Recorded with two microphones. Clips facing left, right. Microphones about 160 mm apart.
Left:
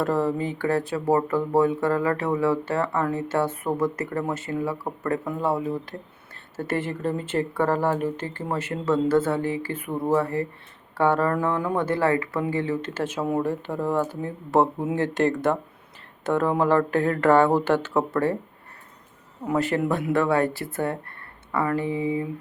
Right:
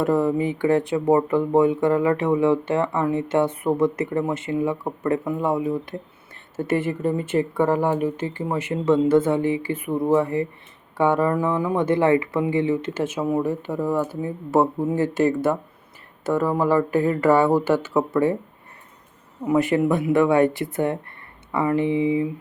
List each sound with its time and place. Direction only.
0.0 s speech: 15° right (ahead or behind)
19.5 s speech: 15° right (ahead or behind)